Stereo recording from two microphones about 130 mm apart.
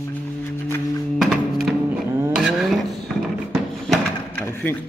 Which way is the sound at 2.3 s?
Centre (ahead or behind).